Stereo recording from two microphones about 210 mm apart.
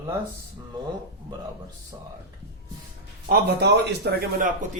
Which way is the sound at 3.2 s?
50° right (ahead or behind).